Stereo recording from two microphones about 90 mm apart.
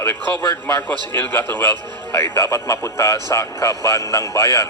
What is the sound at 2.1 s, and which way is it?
Speech, 30° left (ahead or behind).